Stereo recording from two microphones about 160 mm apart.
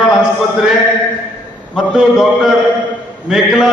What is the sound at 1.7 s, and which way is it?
A man's voice, 5° right (ahead or behind).